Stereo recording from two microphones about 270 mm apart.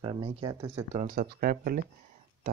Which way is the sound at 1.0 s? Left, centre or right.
Right.